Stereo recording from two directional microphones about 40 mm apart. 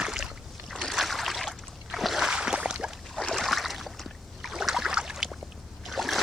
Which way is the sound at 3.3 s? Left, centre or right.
Centre.